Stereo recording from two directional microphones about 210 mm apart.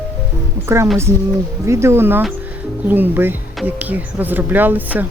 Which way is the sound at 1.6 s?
15° right (ahead or behind).